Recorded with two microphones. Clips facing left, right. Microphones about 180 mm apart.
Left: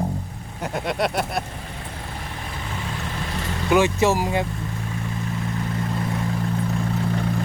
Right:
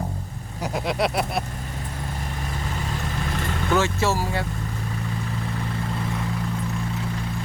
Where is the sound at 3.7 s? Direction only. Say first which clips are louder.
Left 5 dB; 15° left (ahead or behind).